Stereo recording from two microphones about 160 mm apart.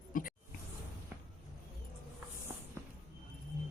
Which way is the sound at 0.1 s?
60° left (ahead or behind).